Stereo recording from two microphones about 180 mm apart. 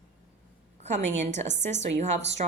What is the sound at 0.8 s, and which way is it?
Speech, 40° right (ahead or behind).